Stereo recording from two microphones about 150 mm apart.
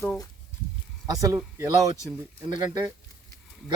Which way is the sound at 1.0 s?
25° right (ahead or behind).